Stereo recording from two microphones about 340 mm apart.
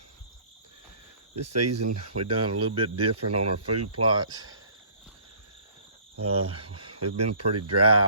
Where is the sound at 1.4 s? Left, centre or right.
Right.